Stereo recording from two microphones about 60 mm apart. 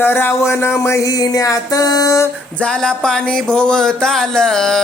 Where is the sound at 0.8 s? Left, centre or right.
Left.